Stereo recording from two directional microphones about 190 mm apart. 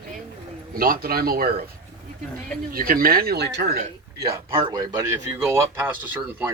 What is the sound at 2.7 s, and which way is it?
Speech, 50° right (ahead or behind).